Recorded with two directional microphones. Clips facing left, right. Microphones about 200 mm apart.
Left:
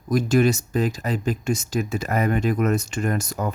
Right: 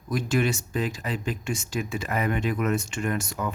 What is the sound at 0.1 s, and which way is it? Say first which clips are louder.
Speech: left 6 dB; 40° left (ahead or behind).